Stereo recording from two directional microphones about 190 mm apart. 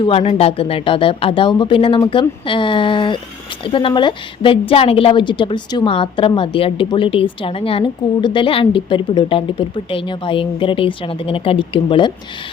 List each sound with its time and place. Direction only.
0.0 s a woman's voice: 30° left (ahead or behind)